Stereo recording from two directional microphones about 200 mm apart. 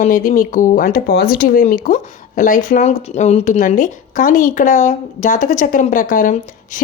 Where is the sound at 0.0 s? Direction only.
40° left (ahead or behind).